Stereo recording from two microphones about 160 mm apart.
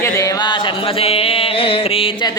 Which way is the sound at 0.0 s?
20° left (ahead or behind).